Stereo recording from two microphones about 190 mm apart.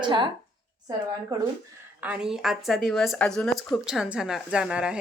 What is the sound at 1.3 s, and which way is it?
Speech, 20° right (ahead or behind).